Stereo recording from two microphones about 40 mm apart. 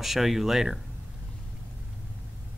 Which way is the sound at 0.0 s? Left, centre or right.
Centre.